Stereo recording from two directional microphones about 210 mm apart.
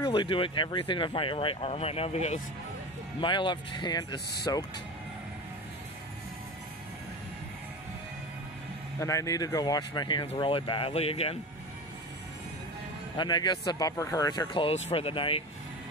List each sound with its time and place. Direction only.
0.0 s speech: 20° left (ahead or behind)
9.0 s speech: 15° left (ahead or behind)
13.2 s speech: 20° left (ahead or behind)